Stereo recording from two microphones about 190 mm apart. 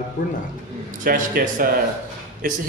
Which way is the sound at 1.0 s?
45° right (ahead or behind).